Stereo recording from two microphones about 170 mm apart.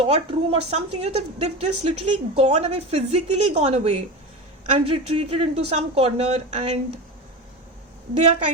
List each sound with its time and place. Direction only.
0.0 s a woman's voice: 35° right (ahead or behind)